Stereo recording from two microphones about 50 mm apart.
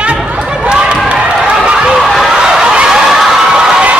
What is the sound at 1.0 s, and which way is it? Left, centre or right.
Run, right.